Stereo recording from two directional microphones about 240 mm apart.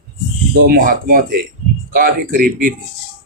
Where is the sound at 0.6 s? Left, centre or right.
Right.